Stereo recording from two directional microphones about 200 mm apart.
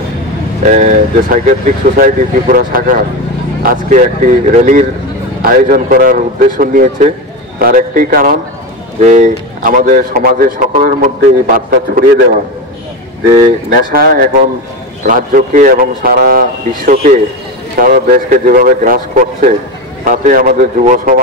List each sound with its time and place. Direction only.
0.7 s a man's voice: 40° right (ahead or behind)
13.4 s a man's voice: 45° right (ahead or behind)